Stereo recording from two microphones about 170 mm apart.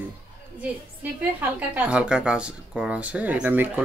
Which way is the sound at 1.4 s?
10° right (ahead or behind).